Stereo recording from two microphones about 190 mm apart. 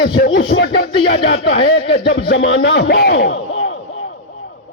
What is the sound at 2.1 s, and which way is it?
Speech, 75° left (ahead or behind).